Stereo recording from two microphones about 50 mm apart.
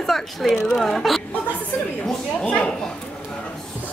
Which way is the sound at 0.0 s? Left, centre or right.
Centre.